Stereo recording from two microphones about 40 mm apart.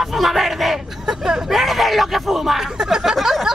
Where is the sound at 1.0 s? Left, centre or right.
Centre.